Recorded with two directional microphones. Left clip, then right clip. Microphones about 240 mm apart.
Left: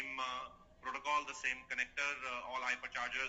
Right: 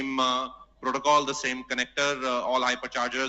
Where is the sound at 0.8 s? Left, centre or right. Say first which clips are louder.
Right 15 dB; right.